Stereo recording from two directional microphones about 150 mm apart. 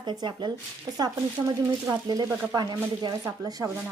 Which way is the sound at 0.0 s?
30° right (ahead or behind).